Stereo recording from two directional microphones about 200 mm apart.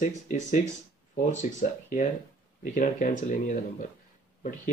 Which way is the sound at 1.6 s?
40° left (ahead or behind).